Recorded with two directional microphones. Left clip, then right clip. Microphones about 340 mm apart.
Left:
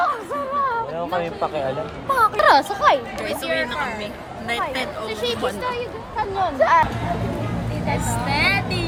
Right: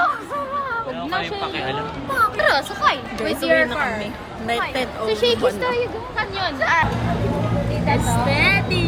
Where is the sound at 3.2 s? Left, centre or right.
Centre.